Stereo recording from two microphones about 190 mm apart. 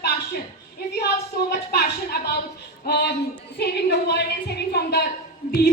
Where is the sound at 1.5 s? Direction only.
55° left (ahead or behind).